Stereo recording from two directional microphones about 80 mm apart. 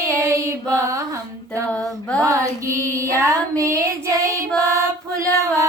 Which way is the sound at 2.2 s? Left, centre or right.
Right.